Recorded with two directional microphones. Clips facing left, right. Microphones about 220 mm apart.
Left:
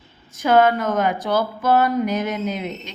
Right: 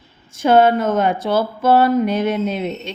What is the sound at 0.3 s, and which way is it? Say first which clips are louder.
A woman's voice: right 3 dB; 30° right (ahead or behind).